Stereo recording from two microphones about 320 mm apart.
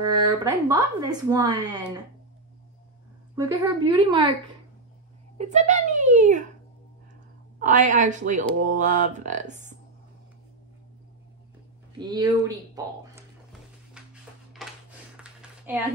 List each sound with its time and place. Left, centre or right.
0.0 s speech: centre
3.3 s speech: centre
5.4 s speech: right
7.5 s speech: right
12.0 s a sound: centre